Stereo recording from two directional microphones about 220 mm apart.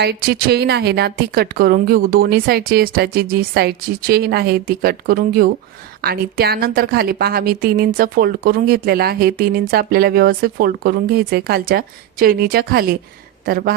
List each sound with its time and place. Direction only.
0.0 s a woman's voice: 45° right (ahead or behind)